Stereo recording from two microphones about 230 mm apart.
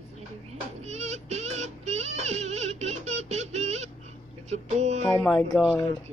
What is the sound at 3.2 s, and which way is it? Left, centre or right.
Music, right.